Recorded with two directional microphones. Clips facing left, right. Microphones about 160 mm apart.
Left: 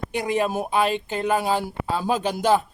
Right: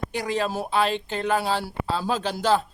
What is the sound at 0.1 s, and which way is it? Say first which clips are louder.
Speech: left 4 dB; 15° left (ahead or behind).